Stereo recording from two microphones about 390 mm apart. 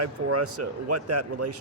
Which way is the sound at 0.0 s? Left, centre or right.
Right.